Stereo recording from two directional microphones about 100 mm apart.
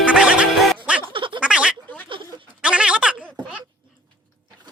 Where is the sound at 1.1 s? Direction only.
55° right (ahead or behind).